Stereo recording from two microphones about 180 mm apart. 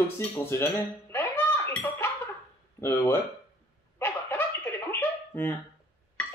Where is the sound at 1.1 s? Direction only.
10° left (ahead or behind).